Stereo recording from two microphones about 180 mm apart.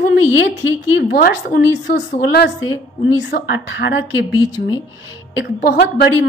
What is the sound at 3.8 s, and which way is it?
Speech, 85° left.